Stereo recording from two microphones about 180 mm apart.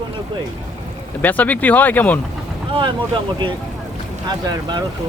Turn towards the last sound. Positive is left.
turn(degrees=-25)  # may be behind; listen again after turning